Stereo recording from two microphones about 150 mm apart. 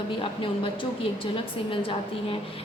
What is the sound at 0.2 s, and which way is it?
A woman's voice, 35° left (ahead or behind).